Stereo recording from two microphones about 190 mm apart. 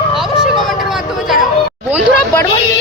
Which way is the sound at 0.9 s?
Centre (ahead or behind).